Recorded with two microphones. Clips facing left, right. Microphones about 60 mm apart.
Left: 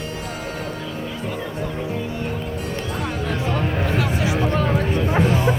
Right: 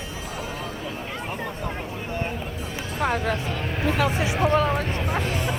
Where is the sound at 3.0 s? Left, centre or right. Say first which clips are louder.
Right 6 dB; right.